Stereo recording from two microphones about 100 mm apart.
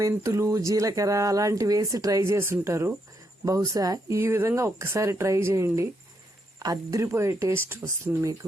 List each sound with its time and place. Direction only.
0.2 s speech: 35° right (ahead or behind)
3.4 s speech: 35° right (ahead or behind)
4.2 s speech: 25° right (ahead or behind)